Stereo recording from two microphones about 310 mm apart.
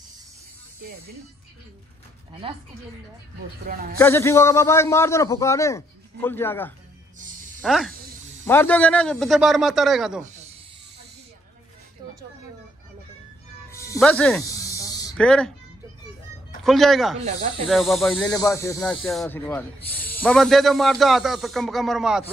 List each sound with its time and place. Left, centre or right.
2.4 s a woman's voice: centre
3.6 s speech: right
4.0 s a man's voice: centre
7.2 s a sound: right
7.6 s speech: centre
10.2 s snake: right
13.7 s snake: centre
16.6 s speech: centre
18.3 s a man's voice: centre